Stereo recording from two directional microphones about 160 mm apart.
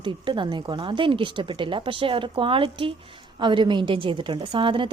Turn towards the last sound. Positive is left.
turn(degrees=-30)  # may be behind; listen again after turning